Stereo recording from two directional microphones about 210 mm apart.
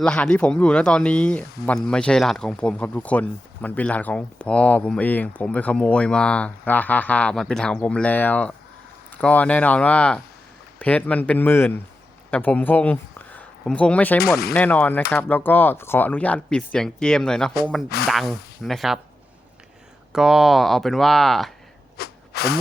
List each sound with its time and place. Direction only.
0.0 s speech: 5° left (ahead or behind)
20.1 s speech: centre (ahead or behind)
21.9 s sneeze: 50° left (ahead or behind)